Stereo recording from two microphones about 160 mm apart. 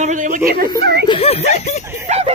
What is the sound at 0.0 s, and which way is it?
Speech, 50° right (ahead or behind).